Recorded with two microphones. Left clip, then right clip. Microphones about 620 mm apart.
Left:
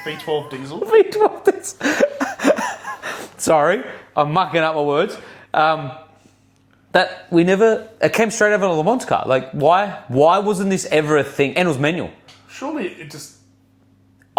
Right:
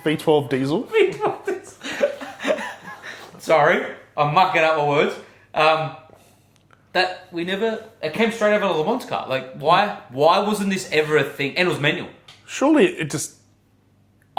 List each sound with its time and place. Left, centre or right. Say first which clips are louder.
0.0 s speech: right 5 dB; right
0.9 s speech: left 7 dB; left
1.8 s a sound: left 6 dB; left
5.5 s speech: left 2 dB; left
6.9 s speech: left 6 dB; left
12.5 s speech: right 9 dB; right